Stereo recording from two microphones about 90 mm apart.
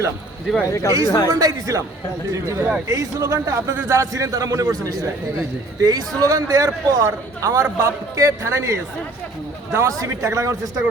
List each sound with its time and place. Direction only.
0.7 s speech: 30° left (ahead or behind)
1.3 s a man's voice: 45° right (ahead or behind)